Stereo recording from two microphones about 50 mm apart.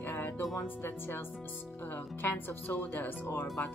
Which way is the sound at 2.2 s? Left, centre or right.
Left.